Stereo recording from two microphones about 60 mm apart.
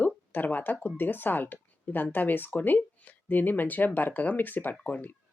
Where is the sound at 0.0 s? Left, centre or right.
Left.